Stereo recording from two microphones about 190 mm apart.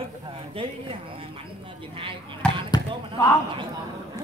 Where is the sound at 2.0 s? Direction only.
25° right (ahead or behind).